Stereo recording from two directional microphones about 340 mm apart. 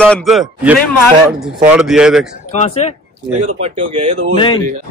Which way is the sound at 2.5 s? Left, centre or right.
Centre.